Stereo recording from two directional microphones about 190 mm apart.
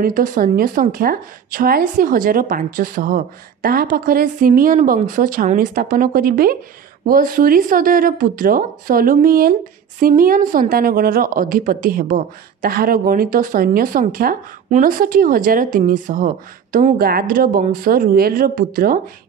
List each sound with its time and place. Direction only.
0.0 s a woman's voice: 45° right (ahead or behind)